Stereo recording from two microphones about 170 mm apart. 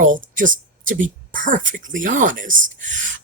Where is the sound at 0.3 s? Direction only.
50° right (ahead or behind).